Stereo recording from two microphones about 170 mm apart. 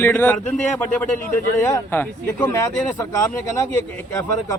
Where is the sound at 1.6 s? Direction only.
20° left (ahead or behind).